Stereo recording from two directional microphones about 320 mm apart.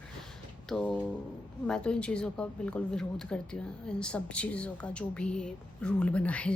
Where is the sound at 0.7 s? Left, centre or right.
Centre.